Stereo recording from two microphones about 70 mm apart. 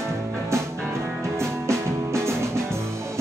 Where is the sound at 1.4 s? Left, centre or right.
Right.